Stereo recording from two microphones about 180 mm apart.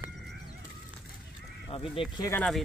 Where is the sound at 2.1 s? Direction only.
20° left (ahead or behind).